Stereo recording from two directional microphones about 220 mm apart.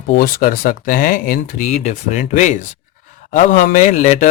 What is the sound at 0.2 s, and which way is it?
Speech, 40° left (ahead or behind).